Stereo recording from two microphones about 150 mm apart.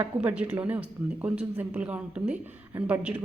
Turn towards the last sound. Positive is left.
turn(degrees=-10)  # may be behind; listen again after turning